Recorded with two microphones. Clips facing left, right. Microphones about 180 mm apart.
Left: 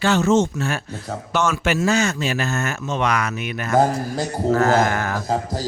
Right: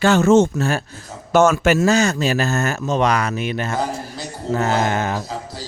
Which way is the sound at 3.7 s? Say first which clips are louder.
Left 6 dB; 50° left (ahead or behind).